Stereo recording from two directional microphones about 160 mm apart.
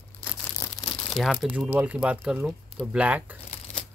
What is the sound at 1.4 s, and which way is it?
Speech, 10° right (ahead or behind).